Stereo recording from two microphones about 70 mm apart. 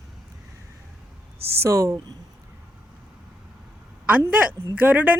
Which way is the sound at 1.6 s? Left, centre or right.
Right.